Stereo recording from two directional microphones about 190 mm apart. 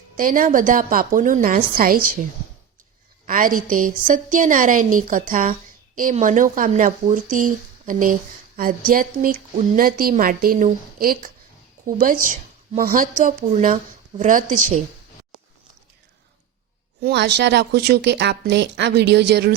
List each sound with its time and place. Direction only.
0.2 s speech: 45° right (ahead or behind)
3.2 s a woman's voice: 45° right (ahead or behind)
17.0 s speech: 60° right (ahead or behind)